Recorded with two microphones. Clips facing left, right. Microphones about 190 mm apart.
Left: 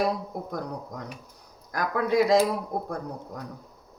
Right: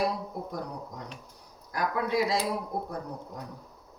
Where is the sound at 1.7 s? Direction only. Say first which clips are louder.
Left 4 dB; 45° left (ahead or behind).